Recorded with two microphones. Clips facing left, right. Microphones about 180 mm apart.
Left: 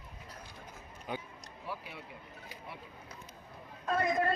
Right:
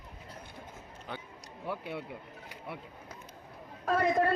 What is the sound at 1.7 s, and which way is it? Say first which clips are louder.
Speech: right 6 dB; 65° right (ahead or behind).